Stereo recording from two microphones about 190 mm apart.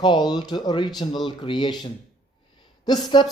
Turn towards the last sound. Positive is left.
turn(degrees=20)  # may be behind; listen again after turning